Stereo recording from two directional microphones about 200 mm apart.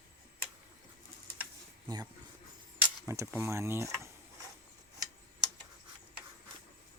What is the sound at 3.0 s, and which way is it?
Speech, 15° right (ahead or behind).